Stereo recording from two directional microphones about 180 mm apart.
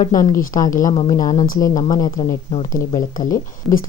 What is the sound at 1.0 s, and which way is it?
Speech, 20° left (ahead or behind).